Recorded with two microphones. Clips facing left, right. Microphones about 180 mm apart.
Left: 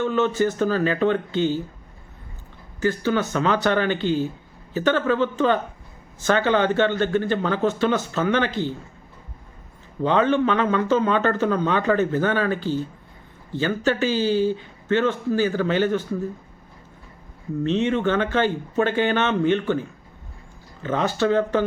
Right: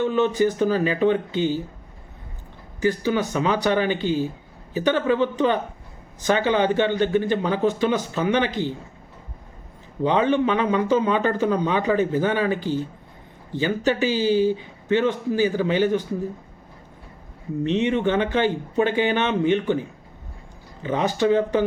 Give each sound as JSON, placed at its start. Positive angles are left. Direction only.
{"t": 0.0, "sound": "speech", "side_deg": -15}
{"t": 2.8, "sound": "speech", "side_deg": -15}
{"t": 10.0, "sound": "speech", "side_deg": -15}
{"t": 17.6, "sound": "speech", "side_deg": -15}